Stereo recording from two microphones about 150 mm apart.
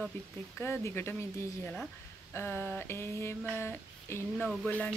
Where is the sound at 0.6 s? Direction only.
15° left (ahead or behind).